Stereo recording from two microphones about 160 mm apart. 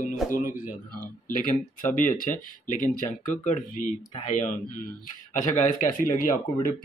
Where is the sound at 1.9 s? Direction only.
55° left (ahead or behind).